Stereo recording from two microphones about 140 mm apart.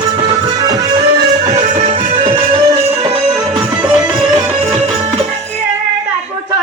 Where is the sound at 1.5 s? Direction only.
55° right (ahead or behind).